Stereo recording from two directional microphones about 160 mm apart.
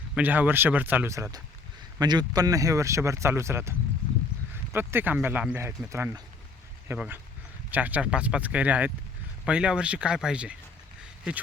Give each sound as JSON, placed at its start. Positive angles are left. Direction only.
{"t": 0.1, "sound": "speech", "side_deg": -10}